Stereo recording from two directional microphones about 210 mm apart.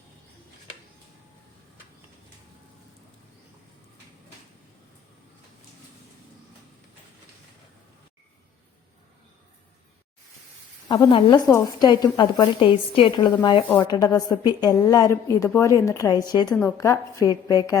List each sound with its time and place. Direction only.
10.8 s a woman's voice: 20° left (ahead or behind)